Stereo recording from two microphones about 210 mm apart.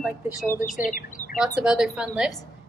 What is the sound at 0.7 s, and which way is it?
Speech, 40° left (ahead or behind).